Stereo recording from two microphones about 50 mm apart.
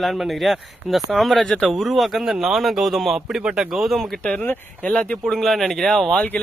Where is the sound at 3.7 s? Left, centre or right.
Centre.